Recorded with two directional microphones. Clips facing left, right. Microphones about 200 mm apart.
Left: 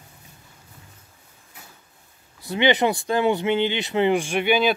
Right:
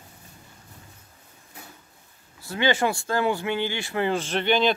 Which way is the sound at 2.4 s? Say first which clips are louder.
Left 4 dB; 20° left (ahead or behind).